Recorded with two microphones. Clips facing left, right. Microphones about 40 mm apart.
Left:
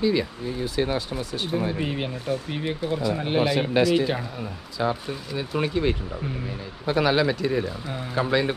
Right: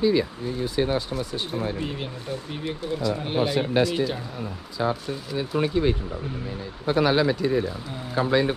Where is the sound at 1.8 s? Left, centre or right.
Left.